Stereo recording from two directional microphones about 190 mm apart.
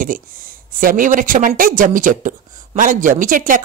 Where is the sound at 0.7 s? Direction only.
45° right (ahead or behind).